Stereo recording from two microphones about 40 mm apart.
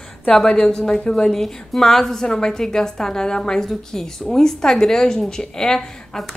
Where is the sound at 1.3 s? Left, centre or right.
Centre.